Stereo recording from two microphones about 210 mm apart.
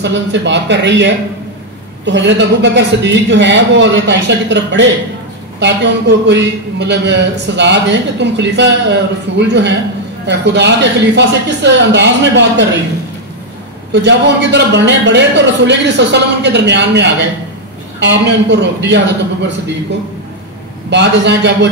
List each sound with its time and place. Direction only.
0.0 s a man's voice: 60° right (ahead or behind)
13.9 s a man's voice: 55° right (ahead or behind)
20.9 s a man's voice: 55° right (ahead or behind)